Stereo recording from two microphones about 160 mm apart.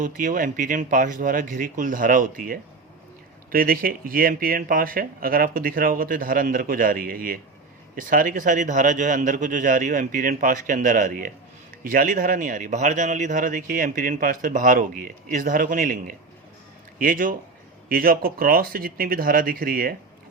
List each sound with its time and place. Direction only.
0.0 s speech: 55° right (ahead or behind)